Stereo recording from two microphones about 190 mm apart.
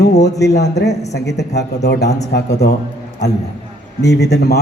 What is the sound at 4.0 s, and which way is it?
Speech, 60° left (ahead or behind).